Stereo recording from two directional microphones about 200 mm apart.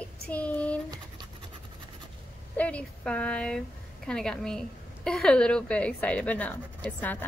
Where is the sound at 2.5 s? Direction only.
5° left (ahead or behind).